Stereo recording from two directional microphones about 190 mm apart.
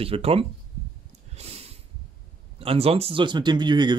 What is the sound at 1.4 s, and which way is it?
Snort, 35° right (ahead or behind).